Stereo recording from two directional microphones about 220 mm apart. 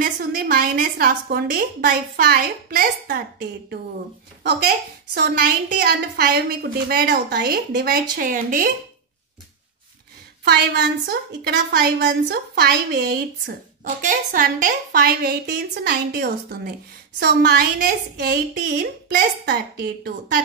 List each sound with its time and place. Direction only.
0.0 s a woman's voice: 45° right (ahead or behind)
10.4 s a woman's voice: 45° right (ahead or behind)